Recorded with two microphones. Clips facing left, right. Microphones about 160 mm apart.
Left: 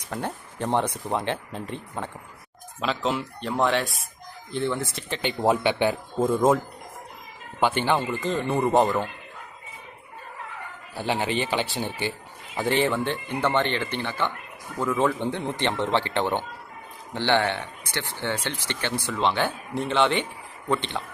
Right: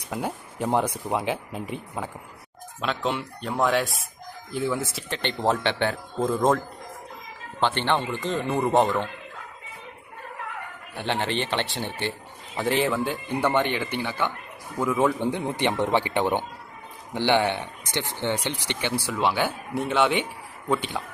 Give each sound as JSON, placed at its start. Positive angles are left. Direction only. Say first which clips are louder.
{"t": 0.1, "sound": "a man's voice", "louder": "right 1 dB", "side_deg": -10}
{"t": 7.6, "sound": "speech", "louder": "left 1 dB", "side_deg": 10}
{"t": 10.9, "sound": "speech", "louder": "left 1 dB", "side_deg": 5}